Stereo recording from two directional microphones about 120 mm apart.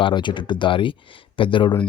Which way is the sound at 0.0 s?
40° left (ahead or behind).